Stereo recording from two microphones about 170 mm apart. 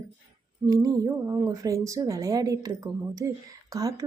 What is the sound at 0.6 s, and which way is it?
Speech, 20° right (ahead or behind).